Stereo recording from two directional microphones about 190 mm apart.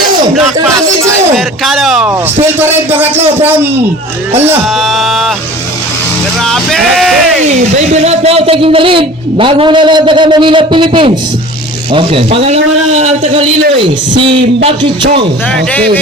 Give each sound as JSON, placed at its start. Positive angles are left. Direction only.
{"t": 1.6, "sound": "speech", "side_deg": 0}
{"t": 2.6, "sound": "a man's voice", "side_deg": -10}
{"t": 4.8, "sound": "speech", "side_deg": 0}
{"t": 6.4, "sound": "speech", "side_deg": 0}
{"t": 8.0, "sound": "a man's voice", "side_deg": -30}